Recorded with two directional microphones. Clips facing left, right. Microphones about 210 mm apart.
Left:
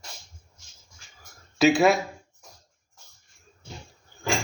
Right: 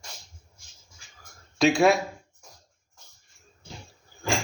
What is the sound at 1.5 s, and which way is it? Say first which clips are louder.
Speech: left 1 dB; 5° left (ahead or behind).